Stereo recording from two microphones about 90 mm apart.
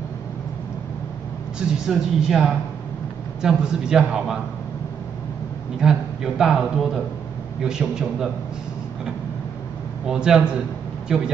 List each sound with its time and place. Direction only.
1.9 s a man's voice: 5° right (ahead or behind)
5.8 s a man's voice: 5° right (ahead or behind)
10.0 s a man's voice: 5° right (ahead or behind)